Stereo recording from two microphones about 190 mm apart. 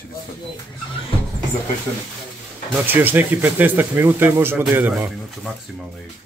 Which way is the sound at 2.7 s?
10° right (ahead or behind).